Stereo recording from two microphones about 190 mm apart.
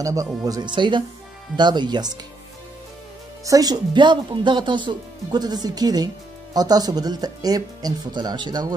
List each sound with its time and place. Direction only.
0.0 s speech: 15° right (ahead or behind)
3.4 s speech: 20° right (ahead or behind)